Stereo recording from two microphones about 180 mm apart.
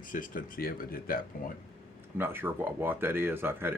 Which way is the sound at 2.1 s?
10° right (ahead or behind).